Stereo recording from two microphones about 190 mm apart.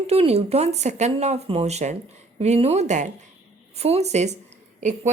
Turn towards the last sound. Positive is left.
turn(degrees=-35)  # may be behind; listen again after turning